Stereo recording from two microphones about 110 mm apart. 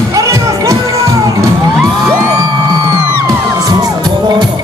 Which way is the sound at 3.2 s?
35° right (ahead or behind).